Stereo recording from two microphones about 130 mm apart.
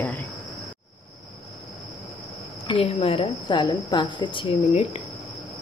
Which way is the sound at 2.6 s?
45° left (ahead or behind).